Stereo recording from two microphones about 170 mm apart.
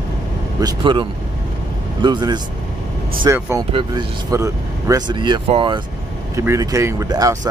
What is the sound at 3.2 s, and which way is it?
Speech, 15° right (ahead or behind).